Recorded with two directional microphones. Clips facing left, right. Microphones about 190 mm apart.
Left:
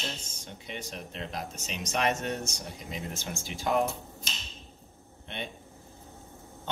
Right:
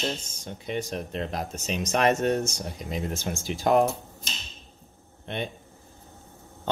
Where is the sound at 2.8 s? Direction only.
40° right (ahead or behind).